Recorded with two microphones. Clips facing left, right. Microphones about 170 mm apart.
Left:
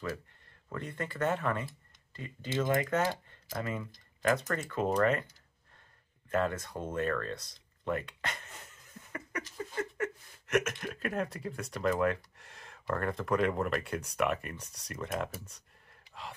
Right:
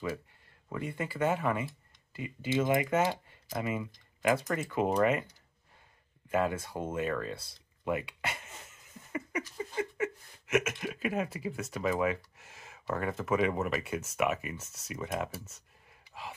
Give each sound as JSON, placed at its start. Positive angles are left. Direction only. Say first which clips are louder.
{"t": 0.7, "sound": "speech", "louder": "right 2 dB", "side_deg": -10}
{"t": 6.3, "sound": "speech", "louder": "right 1 dB", "side_deg": -5}
{"t": 9.1, "sound": "a sound", "louder": "right 4 dB", "side_deg": -10}